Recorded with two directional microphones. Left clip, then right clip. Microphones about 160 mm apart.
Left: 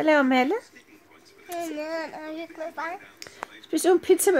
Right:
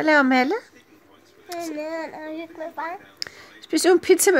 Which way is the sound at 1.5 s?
20° left (ahead or behind).